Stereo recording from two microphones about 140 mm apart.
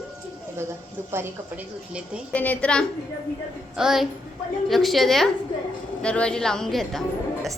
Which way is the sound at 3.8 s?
5° right (ahead or behind).